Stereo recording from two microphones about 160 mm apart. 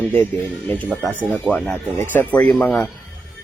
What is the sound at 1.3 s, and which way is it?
Speech, 5° left (ahead or behind).